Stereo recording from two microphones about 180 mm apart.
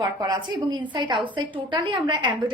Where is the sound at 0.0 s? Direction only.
20° right (ahead or behind).